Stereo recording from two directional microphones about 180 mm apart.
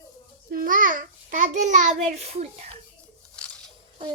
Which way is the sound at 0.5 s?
50° right (ahead or behind).